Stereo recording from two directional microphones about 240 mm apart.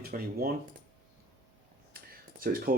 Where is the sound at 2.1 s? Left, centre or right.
Right.